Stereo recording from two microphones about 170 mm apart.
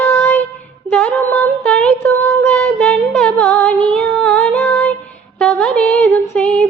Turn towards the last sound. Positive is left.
turn(degrees=10)  # may be behind; listen again after turning